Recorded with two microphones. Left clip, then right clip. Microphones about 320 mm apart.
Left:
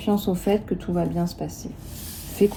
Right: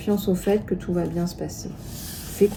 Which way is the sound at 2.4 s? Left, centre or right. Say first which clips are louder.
Right 1 dB; left.